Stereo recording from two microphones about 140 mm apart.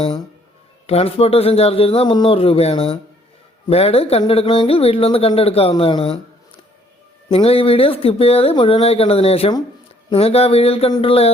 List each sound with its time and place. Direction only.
0.9 s speech: 45° left (ahead or behind)
7.3 s speech: 45° left (ahead or behind)